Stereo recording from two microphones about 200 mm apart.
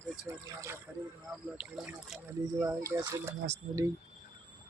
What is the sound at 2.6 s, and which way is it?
Speech, 15° right (ahead or behind).